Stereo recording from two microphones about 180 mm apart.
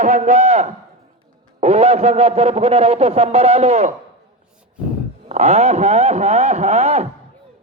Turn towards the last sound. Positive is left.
turn(degrees=-35)  # may be behind; listen again after turning